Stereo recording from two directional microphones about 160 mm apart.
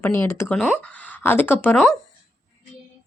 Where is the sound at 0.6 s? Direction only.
Centre (ahead or behind).